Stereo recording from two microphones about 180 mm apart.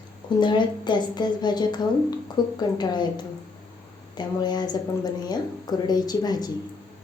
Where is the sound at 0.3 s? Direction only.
25° left (ahead or behind).